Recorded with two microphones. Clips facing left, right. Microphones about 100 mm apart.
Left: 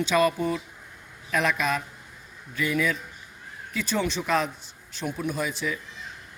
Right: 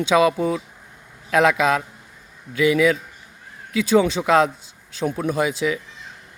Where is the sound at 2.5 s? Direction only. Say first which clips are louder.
Right 9 dB; 90° right.